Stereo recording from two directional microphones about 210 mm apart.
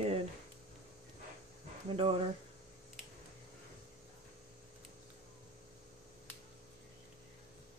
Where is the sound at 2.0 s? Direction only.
25° right (ahead or behind).